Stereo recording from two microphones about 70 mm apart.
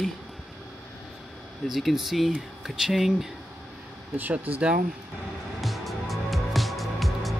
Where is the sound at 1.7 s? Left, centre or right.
Centre.